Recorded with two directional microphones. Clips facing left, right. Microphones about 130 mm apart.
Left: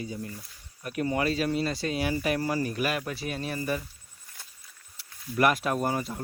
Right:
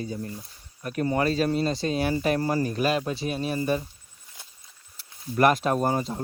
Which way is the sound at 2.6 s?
30° right (ahead or behind).